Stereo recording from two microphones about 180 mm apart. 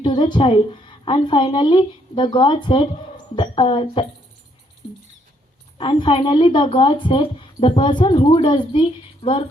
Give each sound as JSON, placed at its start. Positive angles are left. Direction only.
{"t": 0.0, "sound": "speech", "side_deg": 25}
{"t": 5.7, "sound": "speech", "side_deg": 30}